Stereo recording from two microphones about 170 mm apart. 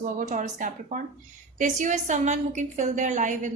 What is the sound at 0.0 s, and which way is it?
A woman's voice, 50° right (ahead or behind).